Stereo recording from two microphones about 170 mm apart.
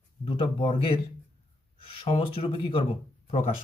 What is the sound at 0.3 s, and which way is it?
Speech, 35° left (ahead or behind).